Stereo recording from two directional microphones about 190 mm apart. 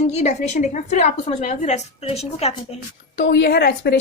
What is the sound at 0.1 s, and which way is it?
A woman's voice, 35° left (ahead or behind).